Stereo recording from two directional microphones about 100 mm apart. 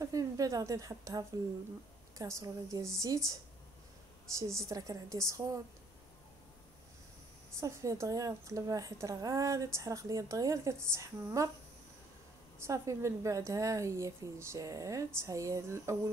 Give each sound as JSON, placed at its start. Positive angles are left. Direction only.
{"t": 0.0, "sound": "a sound", "side_deg": -35}
{"t": 2.1, "sound": "a woman's voice", "side_deg": -30}
{"t": 4.4, "sound": "a woman's voice", "side_deg": -30}
{"t": 7.6, "sound": "a woman's voice", "side_deg": -30}
{"t": 12.5, "sound": "a woman's voice", "side_deg": -30}